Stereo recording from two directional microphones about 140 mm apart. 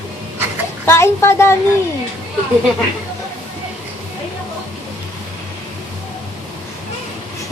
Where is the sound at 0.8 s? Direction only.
20° left (ahead or behind).